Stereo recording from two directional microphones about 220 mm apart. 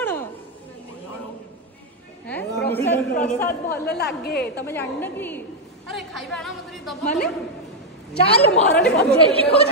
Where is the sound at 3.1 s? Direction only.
30° left (ahead or behind).